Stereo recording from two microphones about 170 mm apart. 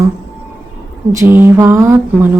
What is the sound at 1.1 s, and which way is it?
Music, 15° right (ahead or behind).